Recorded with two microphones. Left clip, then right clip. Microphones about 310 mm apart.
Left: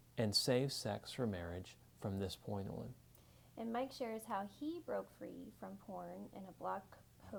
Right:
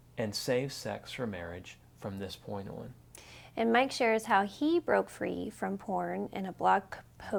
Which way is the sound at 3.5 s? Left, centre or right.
Right.